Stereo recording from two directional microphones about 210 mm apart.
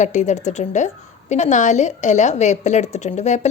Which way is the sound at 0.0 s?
35° left (ahead or behind).